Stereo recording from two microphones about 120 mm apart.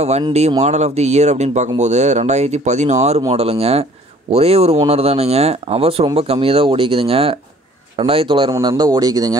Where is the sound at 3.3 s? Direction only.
55° right (ahead or behind).